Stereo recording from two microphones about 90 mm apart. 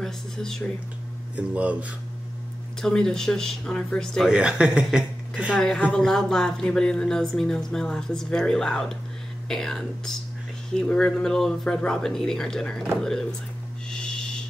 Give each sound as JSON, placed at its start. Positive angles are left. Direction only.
{"t": 0.0, "sound": "speech", "side_deg": 5}
{"t": 1.3, "sound": "speech", "side_deg": -15}
{"t": 2.8, "sound": "speech", "side_deg": 5}
{"t": 4.3, "sound": "speech", "side_deg": -10}
{"t": 5.6, "sound": "speech", "side_deg": 5}
{"t": 13.8, "sound": "owl", "side_deg": 10}